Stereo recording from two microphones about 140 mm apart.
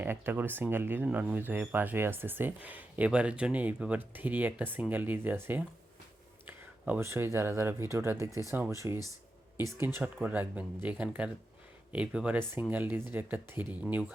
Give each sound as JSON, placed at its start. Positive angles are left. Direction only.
{"t": 0.0, "sound": "speech", "side_deg": -15}
{"t": 6.8, "sound": "speech", "side_deg": -15}